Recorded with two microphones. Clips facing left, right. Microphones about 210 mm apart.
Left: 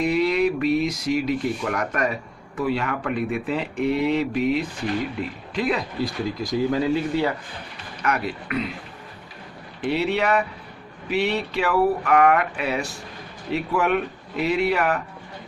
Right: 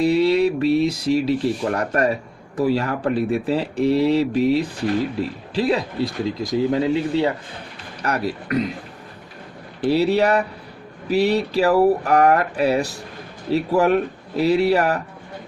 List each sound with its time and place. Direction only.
0.0 s speech: 30° right (ahead or behind)
8.0 s speech: 35° right (ahead or behind)
9.8 s speech: 35° right (ahead or behind)